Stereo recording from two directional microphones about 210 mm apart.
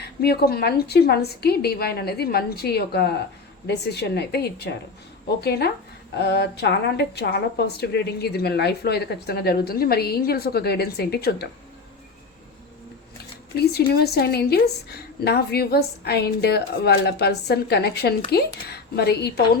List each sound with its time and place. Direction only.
0.2 s speech: 50° left (ahead or behind)
13.6 s speech: 50° left (ahead or behind)